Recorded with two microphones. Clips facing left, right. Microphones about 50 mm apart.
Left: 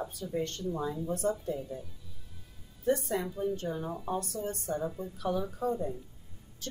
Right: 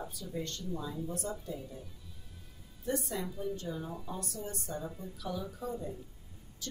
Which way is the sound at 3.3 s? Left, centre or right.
Left.